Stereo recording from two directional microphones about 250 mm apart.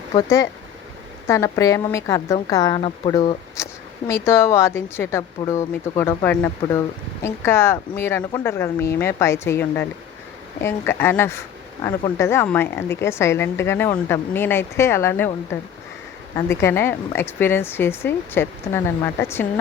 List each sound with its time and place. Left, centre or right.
0.1 s speech: centre
3.6 s a sound: centre
4.1 s speech: centre